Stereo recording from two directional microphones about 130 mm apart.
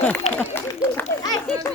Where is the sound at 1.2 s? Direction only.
30° left (ahead or behind).